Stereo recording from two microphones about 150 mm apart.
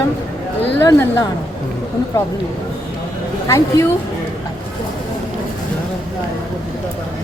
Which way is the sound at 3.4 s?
20° left (ahead or behind).